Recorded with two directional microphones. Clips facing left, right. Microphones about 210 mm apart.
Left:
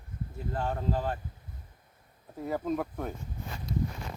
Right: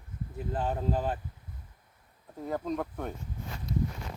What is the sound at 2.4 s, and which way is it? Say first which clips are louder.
Speech: left 1 dB; 5° left (ahead or behind).